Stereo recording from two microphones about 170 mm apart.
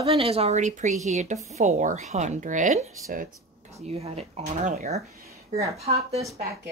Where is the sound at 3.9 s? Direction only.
40° right (ahead or behind).